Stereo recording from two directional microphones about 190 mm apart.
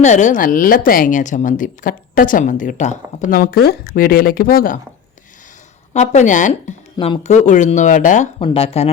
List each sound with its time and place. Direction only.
0.0 s a woman's voice: 40° left (ahead or behind)
5.9 s speech: 40° left (ahead or behind)
6.9 s speech: 25° left (ahead or behind)